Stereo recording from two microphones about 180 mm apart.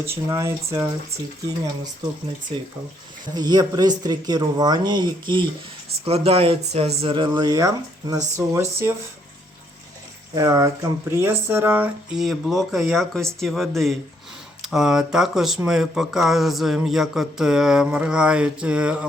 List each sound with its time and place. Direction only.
0.0 s speech: 15° right (ahead or behind)
3.3 s speech: 20° right (ahead or behind)
10.3 s speech: 20° right (ahead or behind)